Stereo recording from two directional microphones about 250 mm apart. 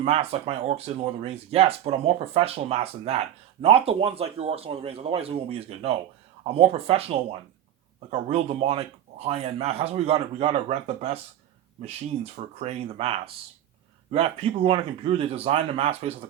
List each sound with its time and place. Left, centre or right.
0.0 s speech: right